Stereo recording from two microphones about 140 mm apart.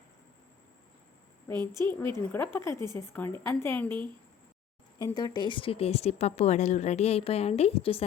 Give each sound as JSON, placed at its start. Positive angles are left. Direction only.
{"t": 1.7, "sound": "a woman's voice", "side_deg": -30}
{"t": 2.1, "sound": "a woman's voice", "side_deg": 15}
{"t": 5.0, "sound": "speech", "side_deg": 30}